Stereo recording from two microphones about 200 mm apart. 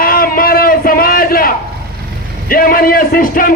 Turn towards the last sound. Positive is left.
turn(degrees=45)  # may be behind; listen again after turning